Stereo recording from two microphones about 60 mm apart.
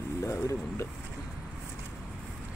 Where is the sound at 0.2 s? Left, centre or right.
Left.